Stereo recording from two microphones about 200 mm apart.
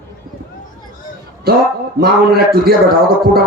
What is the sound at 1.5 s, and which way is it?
Speech, 50° right (ahead or behind).